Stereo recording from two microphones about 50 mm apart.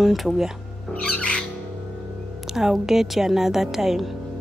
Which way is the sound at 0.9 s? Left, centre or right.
Left.